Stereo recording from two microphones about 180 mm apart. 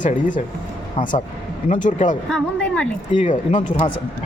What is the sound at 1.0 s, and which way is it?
Speech, 30° left (ahead or behind).